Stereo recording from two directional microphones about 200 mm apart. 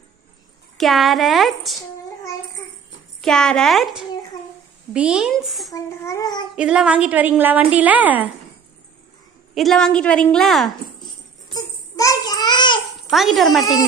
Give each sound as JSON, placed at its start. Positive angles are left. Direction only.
{"t": 0.7, "sound": "a woman's voice", "side_deg": 0}
{"t": 3.2, "sound": "a woman's voice", "side_deg": 5}
{"t": 5.7, "sound": "a child's voice", "side_deg": 15}
{"t": 6.5, "sound": "a woman's voice", "side_deg": -5}
{"t": 9.5, "sound": "a woman's voice", "side_deg": 0}
{"t": 11.5, "sound": "a sound", "side_deg": 20}
{"t": 13.1, "sound": "a woman's voice", "side_deg": 0}